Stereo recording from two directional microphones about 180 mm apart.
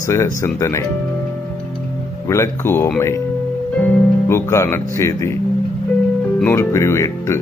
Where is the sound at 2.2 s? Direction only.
15° left (ahead or behind).